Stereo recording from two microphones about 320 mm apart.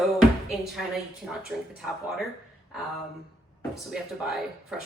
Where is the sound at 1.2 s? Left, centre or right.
Centre.